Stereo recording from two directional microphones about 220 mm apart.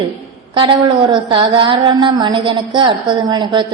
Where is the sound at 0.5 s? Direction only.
20° right (ahead or behind).